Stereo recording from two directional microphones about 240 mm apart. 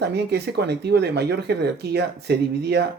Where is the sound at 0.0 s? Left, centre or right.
Right.